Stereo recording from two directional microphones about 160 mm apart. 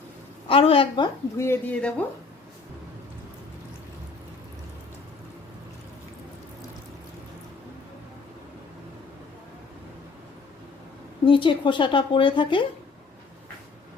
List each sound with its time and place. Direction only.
0.4 s a woman's voice: 35° left (ahead or behind)
1.4 s speech: 10° left (ahead or behind)
11.3 s a woman's voice: 30° left (ahead or behind)